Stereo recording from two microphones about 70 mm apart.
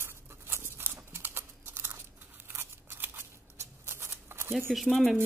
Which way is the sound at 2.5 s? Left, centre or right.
Right.